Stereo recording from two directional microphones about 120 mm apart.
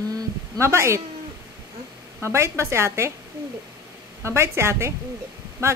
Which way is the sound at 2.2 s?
25° right (ahead or behind).